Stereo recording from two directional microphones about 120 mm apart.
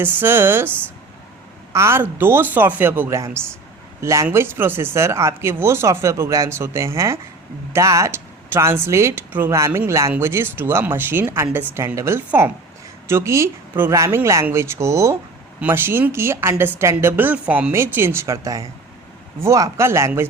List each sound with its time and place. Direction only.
0.0 s speech: 15° right (ahead or behind)
1.7 s speech: 20° right (ahead or behind)
17.7 s speech: 20° right (ahead or behind)